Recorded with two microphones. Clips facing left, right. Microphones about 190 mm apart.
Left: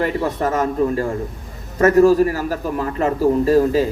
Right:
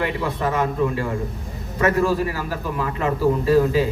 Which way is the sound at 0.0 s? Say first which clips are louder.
Left 4 dB; 40° left (ahead or behind).